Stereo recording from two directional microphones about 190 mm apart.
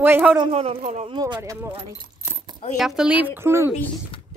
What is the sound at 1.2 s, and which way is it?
Speech, 20° right (ahead or behind).